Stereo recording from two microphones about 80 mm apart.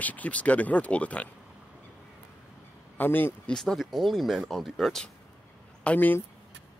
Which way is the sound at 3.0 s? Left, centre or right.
Left.